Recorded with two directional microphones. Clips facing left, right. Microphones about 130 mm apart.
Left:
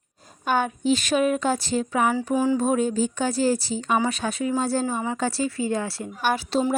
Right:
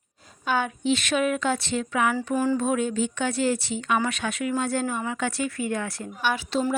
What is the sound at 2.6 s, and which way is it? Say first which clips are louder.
A woman's voice: left 2 dB; 40° left (ahead or behind).